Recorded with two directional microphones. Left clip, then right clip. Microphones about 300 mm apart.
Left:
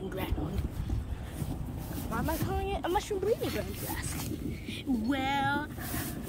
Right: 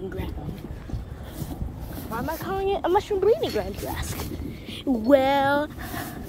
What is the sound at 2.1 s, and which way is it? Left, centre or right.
Speech, right.